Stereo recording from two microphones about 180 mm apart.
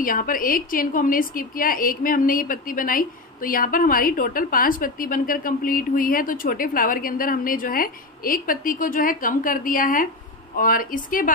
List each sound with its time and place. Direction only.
0.0 s a woman's voice: 50° left (ahead or behind)